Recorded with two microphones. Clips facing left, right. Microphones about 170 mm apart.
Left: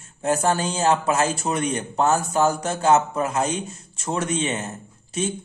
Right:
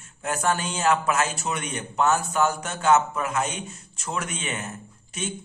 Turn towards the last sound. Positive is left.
turn(degrees=30)  # may be behind; listen again after turning